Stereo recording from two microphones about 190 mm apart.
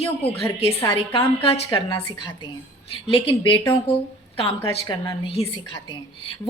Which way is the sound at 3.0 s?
25° left (ahead or behind).